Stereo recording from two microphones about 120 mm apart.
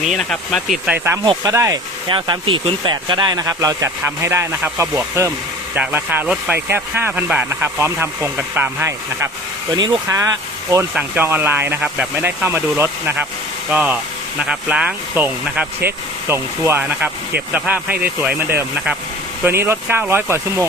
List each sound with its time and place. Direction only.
0.0 s speech: centre (ahead or behind)
0.9 s speech: 20° right (ahead or behind)
2.0 s speech: 40° right (ahead or behind); by 5.3 s 25° right (ahead or behind)
5.7 s speech: 15° right (ahead or behind)
9.7 s speech: 35° right (ahead or behind)
10.9 s speech: 15° right (ahead or behind)